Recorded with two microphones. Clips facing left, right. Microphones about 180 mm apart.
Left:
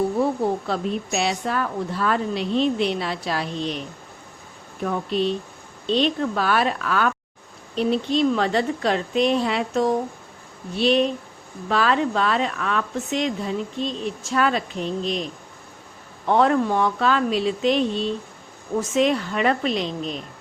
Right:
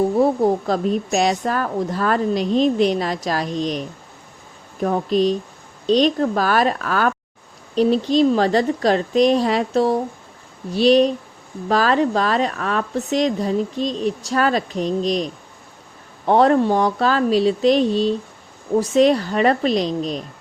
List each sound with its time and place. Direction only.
0.2 s a woman's voice: 40° right (ahead or behind)